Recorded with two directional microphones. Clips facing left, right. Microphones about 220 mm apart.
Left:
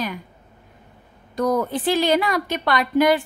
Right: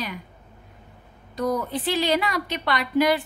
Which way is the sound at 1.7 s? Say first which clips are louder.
Left 4 dB; 50° left (ahead or behind).